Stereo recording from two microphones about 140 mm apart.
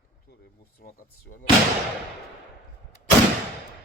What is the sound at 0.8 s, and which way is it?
Speech, 90° left.